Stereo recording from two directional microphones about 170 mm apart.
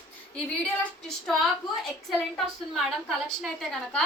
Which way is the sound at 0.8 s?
Centre (ahead or behind).